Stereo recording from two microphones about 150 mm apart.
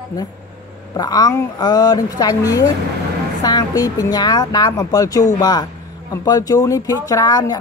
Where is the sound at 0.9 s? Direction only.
25° left (ahead or behind).